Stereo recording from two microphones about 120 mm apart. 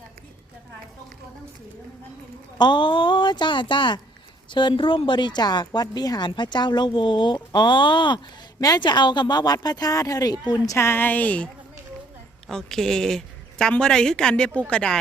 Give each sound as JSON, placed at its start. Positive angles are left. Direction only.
{"t": 2.6, "sound": "speech", "side_deg": 40}
{"t": 10.8, "sound": "a woman's voice", "side_deg": 20}
{"t": 12.5, "sound": "a woman's voice", "side_deg": 5}